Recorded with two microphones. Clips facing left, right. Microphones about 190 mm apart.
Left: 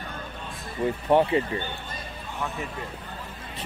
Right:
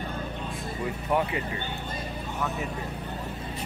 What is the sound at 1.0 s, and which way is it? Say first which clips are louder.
Speech: left 7 dB; 30° left (ahead or behind).